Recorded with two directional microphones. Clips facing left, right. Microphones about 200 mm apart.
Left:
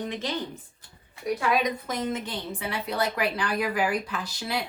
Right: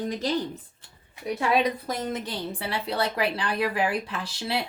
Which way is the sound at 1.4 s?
30° right (ahead or behind).